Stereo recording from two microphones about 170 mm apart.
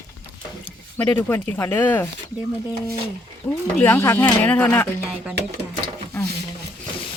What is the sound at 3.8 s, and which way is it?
Speech, 15° left (ahead or behind).